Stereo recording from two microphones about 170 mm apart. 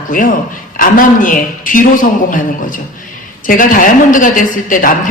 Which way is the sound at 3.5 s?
55° left (ahead or behind).